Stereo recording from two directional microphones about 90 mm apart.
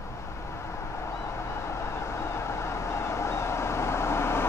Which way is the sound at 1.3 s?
30° left (ahead or behind).